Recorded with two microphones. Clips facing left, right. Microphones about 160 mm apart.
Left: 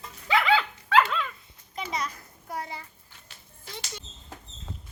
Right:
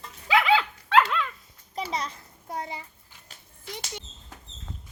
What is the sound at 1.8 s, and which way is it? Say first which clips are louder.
A child's voice: right 1 dB; 30° right (ahead or behind).